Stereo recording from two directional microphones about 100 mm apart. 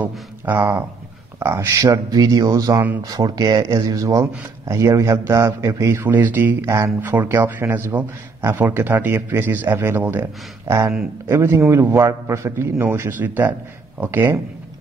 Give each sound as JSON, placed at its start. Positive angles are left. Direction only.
{"t": 0.0, "sound": "speech", "side_deg": -20}
{"t": 6.0, "sound": "speech", "side_deg": -20}
{"t": 6.6, "sound": "a man's voice", "side_deg": -30}